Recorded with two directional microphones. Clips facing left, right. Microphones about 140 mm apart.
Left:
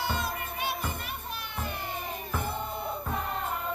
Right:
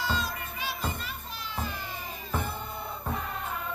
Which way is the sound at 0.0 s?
60° left (ahead or behind).